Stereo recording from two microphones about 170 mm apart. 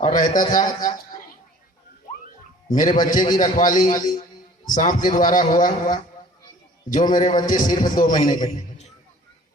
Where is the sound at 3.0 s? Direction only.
50° left (ahead or behind).